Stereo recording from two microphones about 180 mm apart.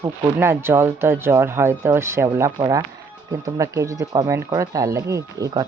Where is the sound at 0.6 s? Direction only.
15° right (ahead or behind).